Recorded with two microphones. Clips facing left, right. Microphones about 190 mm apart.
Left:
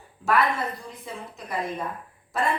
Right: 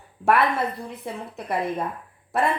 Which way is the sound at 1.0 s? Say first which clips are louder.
Right 4 dB; 60° right (ahead or behind).